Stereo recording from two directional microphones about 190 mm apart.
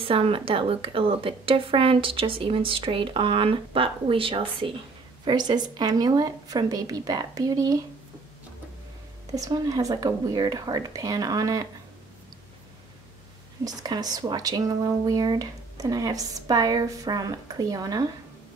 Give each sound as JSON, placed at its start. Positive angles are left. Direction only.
{"t": 0.0, "sound": "a woman's voice", "side_deg": -30}
{"t": 9.3, "sound": "a woman's voice", "side_deg": -20}
{"t": 13.7, "sound": "a woman's voice", "side_deg": -20}